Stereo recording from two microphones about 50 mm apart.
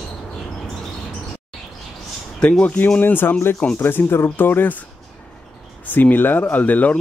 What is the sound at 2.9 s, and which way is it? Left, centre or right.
Speech, left.